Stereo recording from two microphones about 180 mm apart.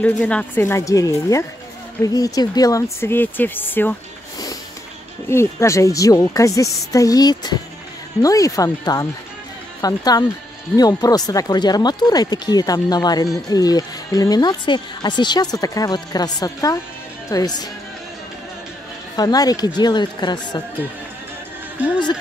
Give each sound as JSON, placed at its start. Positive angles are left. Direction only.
{"t": 0.0, "sound": "speech", "side_deg": 5}
{"t": 5.3, "sound": "speech", "side_deg": 15}
{"t": 19.1, "sound": "speech", "side_deg": 20}